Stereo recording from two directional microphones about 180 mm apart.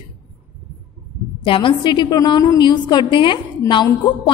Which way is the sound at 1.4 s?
30° left (ahead or behind).